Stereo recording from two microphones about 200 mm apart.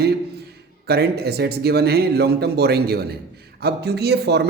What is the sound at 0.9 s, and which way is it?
Speech, 50° right (ahead or behind).